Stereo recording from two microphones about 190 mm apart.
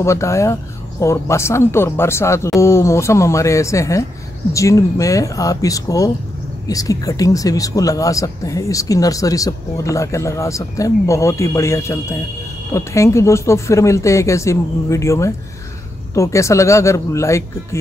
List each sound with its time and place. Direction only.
0.0 s speech: 15° left (ahead or behind)